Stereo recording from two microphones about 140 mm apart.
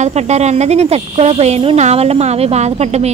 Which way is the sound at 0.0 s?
50° right (ahead or behind).